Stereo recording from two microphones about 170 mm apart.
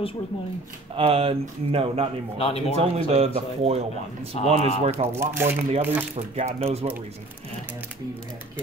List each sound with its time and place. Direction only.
0.9 s speech: 35° right (ahead or behind)
2.3 s speech: 35° left (ahead or behind)
2.8 s speech: 35° right (ahead or behind)
5.0 s speech: 15° right (ahead or behind)
6.1 s speech: 35° right (ahead or behind)